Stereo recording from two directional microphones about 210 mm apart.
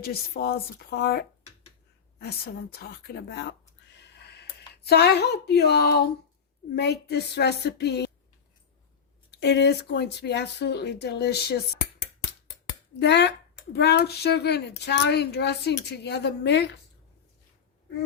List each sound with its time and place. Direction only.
0.0 s speech: 50° left (ahead or behind)
3.9 s a sound: 55° left (ahead or behind)
6.7 s speech: 50° left (ahead or behind)
9.4 s speech: 55° left (ahead or behind)
13.0 s speech: 55° left (ahead or behind)